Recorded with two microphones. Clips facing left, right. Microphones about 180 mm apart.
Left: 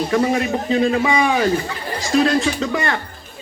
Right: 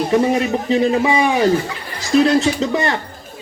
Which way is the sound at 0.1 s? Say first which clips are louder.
Right 3 dB; 20° right (ahead or behind).